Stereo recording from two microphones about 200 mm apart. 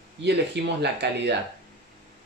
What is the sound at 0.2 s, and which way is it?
Speech, 60° right (ahead or behind).